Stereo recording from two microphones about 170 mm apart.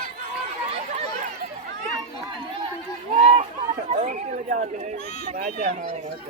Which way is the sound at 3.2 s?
35° right (ahead or behind).